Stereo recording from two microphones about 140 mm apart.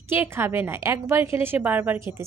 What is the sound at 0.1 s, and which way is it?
A woman's voice, 15° right (ahead or behind).